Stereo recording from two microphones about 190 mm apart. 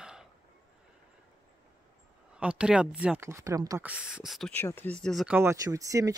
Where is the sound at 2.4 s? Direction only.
5° right (ahead or behind).